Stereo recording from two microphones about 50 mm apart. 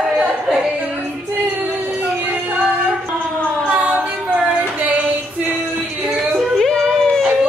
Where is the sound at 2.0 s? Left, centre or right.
Right.